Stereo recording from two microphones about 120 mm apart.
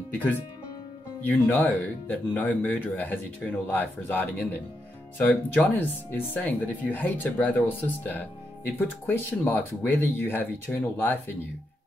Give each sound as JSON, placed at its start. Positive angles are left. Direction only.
{"t": 0.1, "sound": "speech", "side_deg": 15}